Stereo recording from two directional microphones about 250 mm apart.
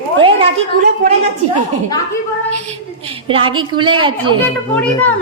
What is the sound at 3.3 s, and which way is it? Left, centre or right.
A woman's voice, right.